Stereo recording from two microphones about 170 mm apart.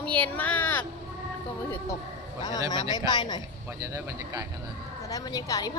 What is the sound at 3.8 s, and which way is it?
Speech, 20° right (ahead or behind).